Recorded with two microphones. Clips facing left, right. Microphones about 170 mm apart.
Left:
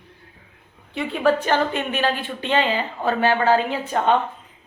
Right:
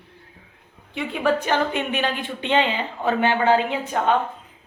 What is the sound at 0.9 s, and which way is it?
Speech, 10° right (ahead or behind).